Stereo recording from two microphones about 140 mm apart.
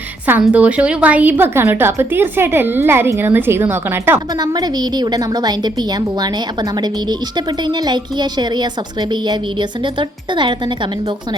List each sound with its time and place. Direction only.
0.4 s a woman's voice: 10° right (ahead or behind)
4.4 s a woman's voice: 30° right (ahead or behind)